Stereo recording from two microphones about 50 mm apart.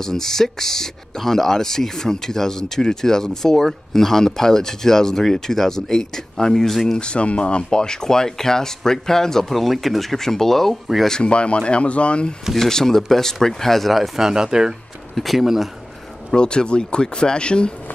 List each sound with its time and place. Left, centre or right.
0.0 s speech: centre
7.0 s speech: left; by 10.8 s centre
11.1 s speech: centre
12.5 s speech: centre
15.1 s speech: centre
16.3 s speech: centre